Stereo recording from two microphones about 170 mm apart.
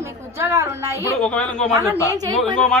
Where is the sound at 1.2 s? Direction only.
5° left (ahead or behind).